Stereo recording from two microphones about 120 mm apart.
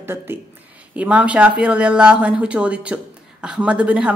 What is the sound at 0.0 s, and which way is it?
Speech, 20° right (ahead or behind).